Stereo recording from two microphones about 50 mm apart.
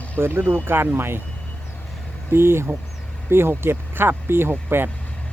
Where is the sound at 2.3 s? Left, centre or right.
Right.